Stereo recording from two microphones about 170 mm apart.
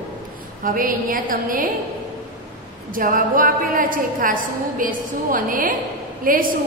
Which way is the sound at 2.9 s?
55° right (ahead or behind).